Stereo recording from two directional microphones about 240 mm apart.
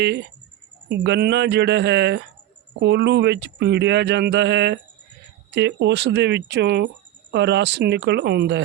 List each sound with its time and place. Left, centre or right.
0.9 s speech: right